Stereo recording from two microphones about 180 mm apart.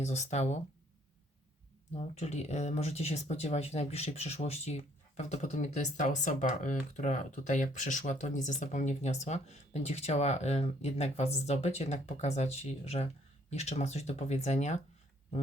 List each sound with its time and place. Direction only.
0.0 s speech: 40° left (ahead or behind)
2.0 s speech: 35° left (ahead or behind)